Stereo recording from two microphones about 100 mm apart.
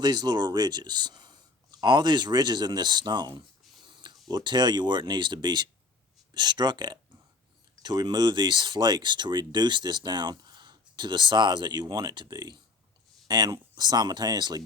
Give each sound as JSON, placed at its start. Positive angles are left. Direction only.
{"t": 0.0, "sound": "speech", "side_deg": -45}